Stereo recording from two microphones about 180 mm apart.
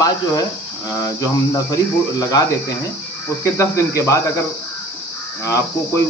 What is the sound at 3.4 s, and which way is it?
Speech, 15° left (ahead or behind).